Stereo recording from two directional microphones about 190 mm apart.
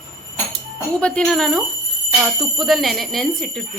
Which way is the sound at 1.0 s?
5° left (ahead or behind).